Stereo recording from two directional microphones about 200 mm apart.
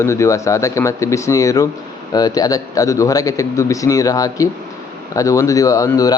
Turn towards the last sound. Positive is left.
turn(degrees=15)  # may be behind; listen again after turning